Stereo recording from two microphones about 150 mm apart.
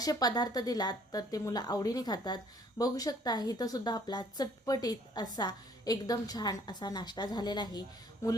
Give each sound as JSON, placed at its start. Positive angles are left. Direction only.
{"t": 0.0, "sound": "a woman's voice", "side_deg": 25}